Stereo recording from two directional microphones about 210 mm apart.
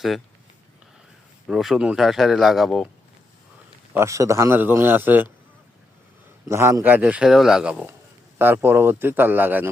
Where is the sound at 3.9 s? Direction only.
15° right (ahead or behind).